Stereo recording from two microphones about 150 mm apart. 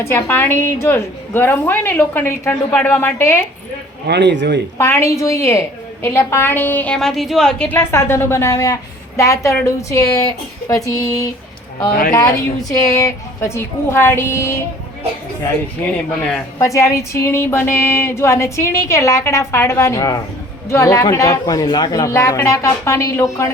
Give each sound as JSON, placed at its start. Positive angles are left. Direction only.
{"t": 0.0, "sound": "a woman's voice", "side_deg": 15}
{"t": 4.0, "sound": "speech", "side_deg": -90}
{"t": 4.8, "sound": "a woman's voice", "side_deg": 15}
{"t": 16.6, "sound": "speech", "side_deg": 20}